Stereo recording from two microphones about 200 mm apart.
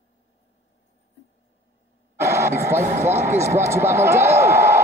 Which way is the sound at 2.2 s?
15° right (ahead or behind).